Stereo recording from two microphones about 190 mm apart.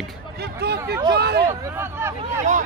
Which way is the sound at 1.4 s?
10° right (ahead or behind).